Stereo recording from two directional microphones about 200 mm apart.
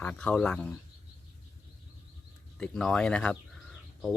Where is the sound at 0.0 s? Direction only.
5° left (ahead or behind).